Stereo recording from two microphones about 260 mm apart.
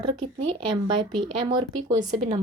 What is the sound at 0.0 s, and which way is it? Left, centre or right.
Speech, centre.